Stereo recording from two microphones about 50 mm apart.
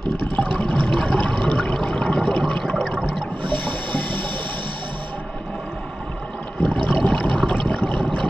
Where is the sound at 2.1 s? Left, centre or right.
Left.